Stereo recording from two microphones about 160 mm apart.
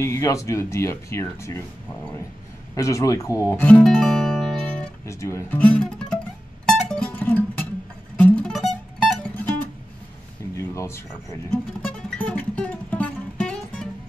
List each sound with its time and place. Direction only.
0.0 s speech: 20° left (ahead or behind)
2.7 s speech: 20° left (ahead or behind)
5.0 s speech: 15° left (ahead or behind)
6.6 s music: 5° left (ahead or behind)
10.5 s a sound: 20° left (ahead or behind)
11.5 s music: 5° left (ahead or behind)